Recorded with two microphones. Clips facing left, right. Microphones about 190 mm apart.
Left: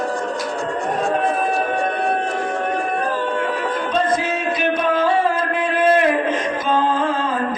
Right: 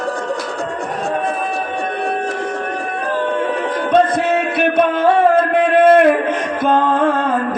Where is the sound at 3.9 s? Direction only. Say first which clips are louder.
Right 8 dB; 60° right (ahead or behind).